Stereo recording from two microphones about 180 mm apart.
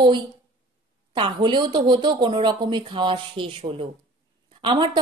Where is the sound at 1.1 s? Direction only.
25° right (ahead or behind).